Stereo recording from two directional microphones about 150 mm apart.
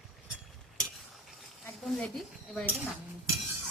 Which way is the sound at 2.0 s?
Centre (ahead or behind).